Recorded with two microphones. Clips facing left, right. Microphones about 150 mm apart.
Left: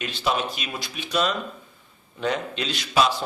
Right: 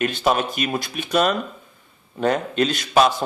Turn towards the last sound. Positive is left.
turn(degrees=-50)  # may be behind; listen again after turning